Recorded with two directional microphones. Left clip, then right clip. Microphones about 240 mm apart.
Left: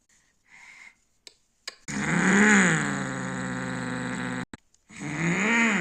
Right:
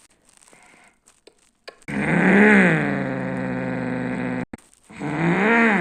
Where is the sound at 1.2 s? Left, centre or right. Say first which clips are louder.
Left 1 dB; left.